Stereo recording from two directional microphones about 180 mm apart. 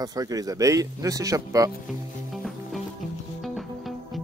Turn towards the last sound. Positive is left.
turn(degrees=0)  # may be behind; listen again after turning